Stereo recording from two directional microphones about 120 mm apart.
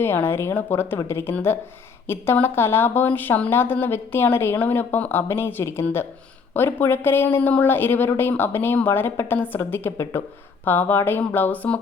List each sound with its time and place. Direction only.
0.0 s a woman's voice: 20° left (ahead or behind)